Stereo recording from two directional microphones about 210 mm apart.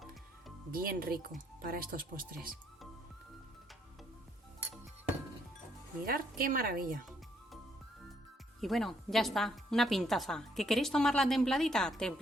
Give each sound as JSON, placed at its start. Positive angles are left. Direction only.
{"t": 0.7, "sound": "speech", "side_deg": -45}
{"t": 6.1, "sound": "speech", "side_deg": -45}
{"t": 8.6, "sound": "a woman's voice", "side_deg": 0}